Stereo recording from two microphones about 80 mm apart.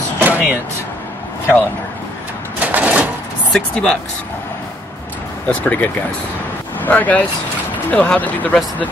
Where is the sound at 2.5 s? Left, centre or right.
Centre.